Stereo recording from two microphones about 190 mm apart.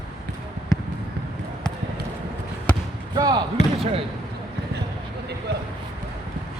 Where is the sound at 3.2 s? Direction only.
20° right (ahead or behind).